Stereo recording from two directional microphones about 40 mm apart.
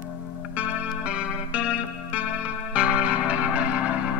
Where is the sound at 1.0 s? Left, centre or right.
Right.